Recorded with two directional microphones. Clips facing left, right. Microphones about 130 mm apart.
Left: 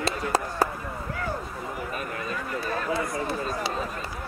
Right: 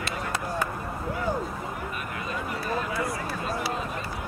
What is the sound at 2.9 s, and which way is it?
Run, 25° left (ahead or behind).